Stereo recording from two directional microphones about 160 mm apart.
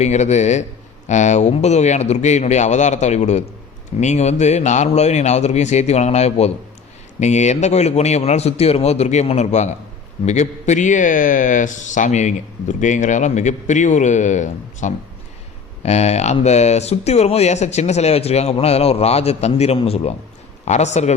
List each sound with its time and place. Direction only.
0.0 s speech: 45° left (ahead or behind)